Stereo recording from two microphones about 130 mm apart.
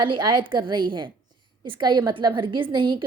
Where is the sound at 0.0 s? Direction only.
35° right (ahead or behind).